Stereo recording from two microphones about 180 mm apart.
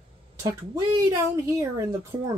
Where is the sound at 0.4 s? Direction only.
20° right (ahead or behind).